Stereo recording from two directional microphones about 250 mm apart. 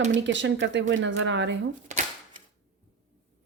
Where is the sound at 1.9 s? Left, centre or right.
Right.